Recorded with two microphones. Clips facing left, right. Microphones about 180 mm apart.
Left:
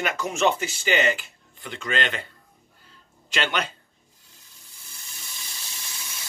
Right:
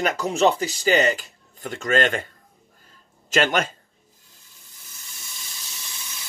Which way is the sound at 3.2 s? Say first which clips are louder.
Right 6 dB; 45° right (ahead or behind).